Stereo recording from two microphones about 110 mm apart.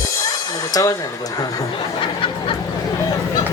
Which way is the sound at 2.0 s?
50° left (ahead or behind).